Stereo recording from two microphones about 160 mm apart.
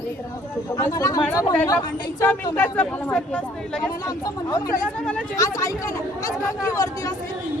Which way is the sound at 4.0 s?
25° left (ahead or behind).